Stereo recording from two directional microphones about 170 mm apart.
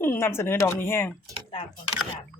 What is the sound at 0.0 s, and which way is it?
Speech, 15° left (ahead or behind).